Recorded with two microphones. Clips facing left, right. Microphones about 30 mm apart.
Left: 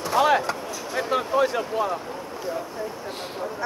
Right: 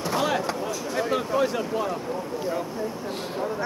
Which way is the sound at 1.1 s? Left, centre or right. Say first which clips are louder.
Left 3 dB; centre.